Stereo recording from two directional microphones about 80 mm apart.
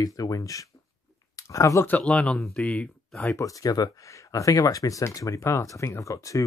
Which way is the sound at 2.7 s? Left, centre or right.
Centre.